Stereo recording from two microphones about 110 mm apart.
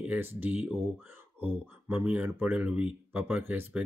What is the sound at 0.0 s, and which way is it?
Speech, 15° right (ahead or behind).